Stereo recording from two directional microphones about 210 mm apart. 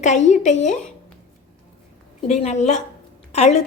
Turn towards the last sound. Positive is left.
turn(degrees=30)  # may be behind; listen again after turning